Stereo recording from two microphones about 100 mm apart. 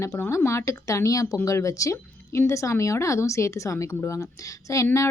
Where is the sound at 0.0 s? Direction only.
30° left (ahead or behind).